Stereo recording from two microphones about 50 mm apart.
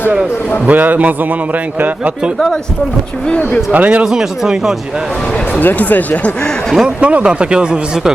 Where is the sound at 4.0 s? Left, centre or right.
Centre.